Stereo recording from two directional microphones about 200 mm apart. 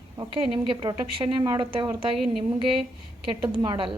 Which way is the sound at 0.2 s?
25° right (ahead or behind).